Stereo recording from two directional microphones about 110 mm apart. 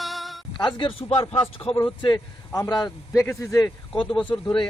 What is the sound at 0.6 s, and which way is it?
Speech, 45° left (ahead or behind).